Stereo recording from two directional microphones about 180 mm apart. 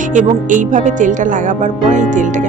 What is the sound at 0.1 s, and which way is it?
Speech, 45° right (ahead or behind).